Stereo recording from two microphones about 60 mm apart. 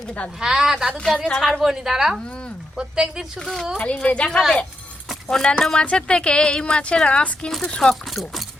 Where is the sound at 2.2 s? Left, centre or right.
Centre.